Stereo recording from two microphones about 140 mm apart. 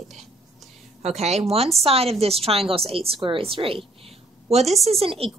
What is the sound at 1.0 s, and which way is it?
A woman's voice, 50° right (ahead or behind).